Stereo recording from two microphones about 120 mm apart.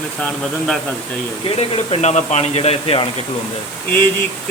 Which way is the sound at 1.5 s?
60° left (ahead or behind).